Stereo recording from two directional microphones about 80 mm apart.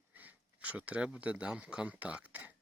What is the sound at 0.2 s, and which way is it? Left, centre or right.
Speech, right.